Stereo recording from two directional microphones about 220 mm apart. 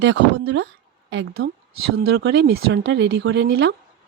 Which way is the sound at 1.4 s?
70° right (ahead or behind).